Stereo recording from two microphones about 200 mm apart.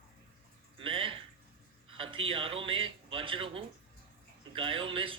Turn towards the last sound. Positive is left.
turn(degrees=-25)  # may be behind; listen again after turning